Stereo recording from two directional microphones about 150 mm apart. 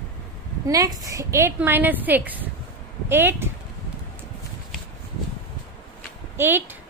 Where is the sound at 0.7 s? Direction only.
25° right (ahead or behind).